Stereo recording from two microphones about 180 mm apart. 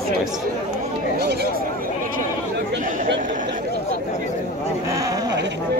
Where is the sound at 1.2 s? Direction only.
60° right (ahead or behind).